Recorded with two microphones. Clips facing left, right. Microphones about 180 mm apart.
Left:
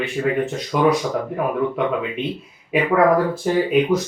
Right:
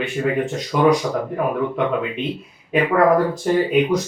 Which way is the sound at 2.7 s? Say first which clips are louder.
Even; 5° left (ahead or behind).